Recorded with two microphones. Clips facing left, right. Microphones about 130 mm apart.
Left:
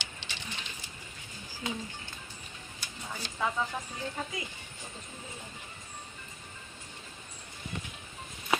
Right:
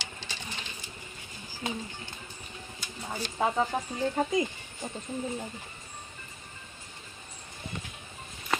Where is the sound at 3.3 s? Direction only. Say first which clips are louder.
Right 5 dB; 35° right (ahead or behind).